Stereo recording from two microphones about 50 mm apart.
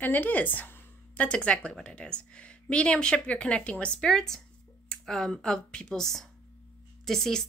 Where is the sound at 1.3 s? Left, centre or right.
Left.